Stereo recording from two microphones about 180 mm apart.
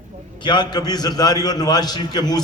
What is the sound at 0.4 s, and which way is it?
A man's voice, 25° left (ahead or behind).